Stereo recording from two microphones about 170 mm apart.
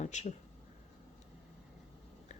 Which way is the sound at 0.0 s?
45° left (ahead or behind).